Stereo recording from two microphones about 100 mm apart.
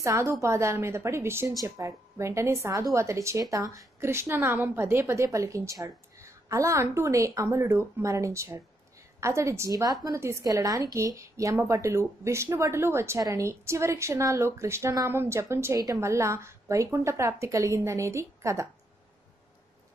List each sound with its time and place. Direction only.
0.0 s a woman's voice: 25° right (ahead or behind)